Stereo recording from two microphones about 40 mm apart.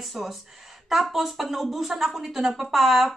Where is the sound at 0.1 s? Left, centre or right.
Centre.